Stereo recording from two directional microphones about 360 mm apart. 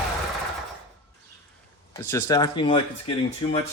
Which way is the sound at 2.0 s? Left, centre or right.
Centre.